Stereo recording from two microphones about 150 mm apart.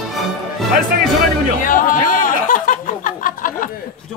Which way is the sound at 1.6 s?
60° left (ahead or behind).